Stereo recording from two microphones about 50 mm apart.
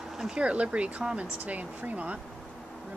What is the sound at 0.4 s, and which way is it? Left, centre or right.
Speech, right.